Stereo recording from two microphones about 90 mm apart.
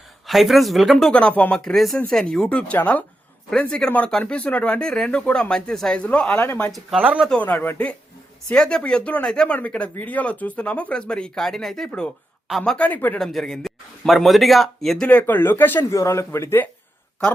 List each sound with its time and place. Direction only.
0.3 s speech: centre (ahead or behind)
1.1 s speech: 15° left (ahead or behind)
7.0 s speech: 15° right (ahead or behind)
7.3 s speech: 15° left (ahead or behind)
12.7 s speech: 15° left (ahead or behind)
13.1 s speech: 5° left (ahead or behind)
15.0 s speech: 20° left (ahead or behind)
15.9 s speech: 35° left (ahead or behind)